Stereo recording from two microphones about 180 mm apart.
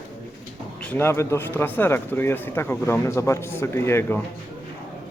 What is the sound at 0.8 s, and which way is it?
Speech, 10° left (ahead or behind).